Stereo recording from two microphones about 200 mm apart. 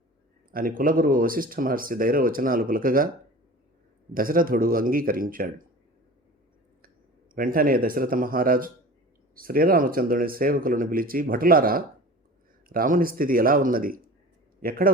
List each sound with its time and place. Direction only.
0.5 s speech: 45° right (ahead or behind)
4.1 s speech: 45° right (ahead or behind)
7.3 s a man's voice: 45° right (ahead or behind)